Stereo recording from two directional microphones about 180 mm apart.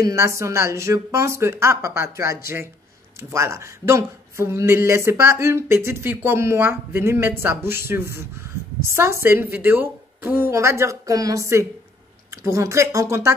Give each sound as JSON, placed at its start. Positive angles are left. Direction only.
{"t": 0.0, "sound": "speech", "side_deg": -15}